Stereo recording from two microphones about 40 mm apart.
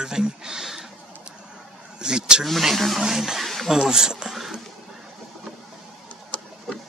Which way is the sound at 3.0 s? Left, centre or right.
Centre.